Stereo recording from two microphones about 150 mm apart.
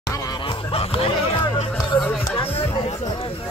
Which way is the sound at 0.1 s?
25° left (ahead or behind).